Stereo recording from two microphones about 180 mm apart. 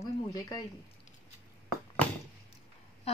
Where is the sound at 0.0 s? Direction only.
20° left (ahead or behind).